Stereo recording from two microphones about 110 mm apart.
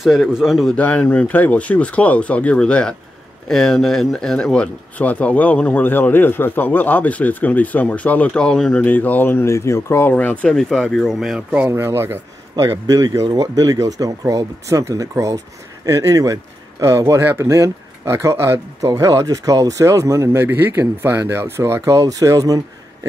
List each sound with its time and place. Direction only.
0.0 s a man's voice: centre (ahead or behind)
0.7 s speech: 15° left (ahead or behind); by 11.6 s 5° right (ahead or behind)
11.6 s speech: 20° right (ahead or behind)
12.5 s speech: 35° right (ahead or behind)